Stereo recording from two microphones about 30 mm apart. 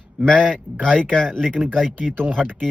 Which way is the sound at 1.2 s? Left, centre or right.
Centre.